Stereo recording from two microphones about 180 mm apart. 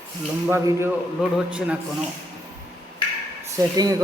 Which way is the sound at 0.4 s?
15° right (ahead or behind).